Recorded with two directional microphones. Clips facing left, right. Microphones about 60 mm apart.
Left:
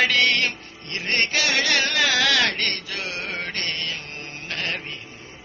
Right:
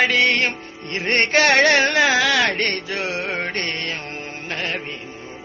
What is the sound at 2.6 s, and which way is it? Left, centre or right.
Music, right.